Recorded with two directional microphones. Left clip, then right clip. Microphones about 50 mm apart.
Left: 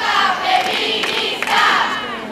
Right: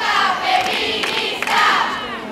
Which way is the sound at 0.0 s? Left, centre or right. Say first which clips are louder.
Left 1 dB; centre.